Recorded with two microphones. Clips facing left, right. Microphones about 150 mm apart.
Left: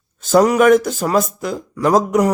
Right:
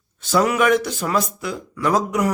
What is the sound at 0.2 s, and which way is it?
Speech, 45° left (ahead or behind).